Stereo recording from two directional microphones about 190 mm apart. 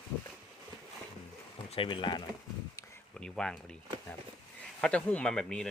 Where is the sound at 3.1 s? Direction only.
5° left (ahead or behind).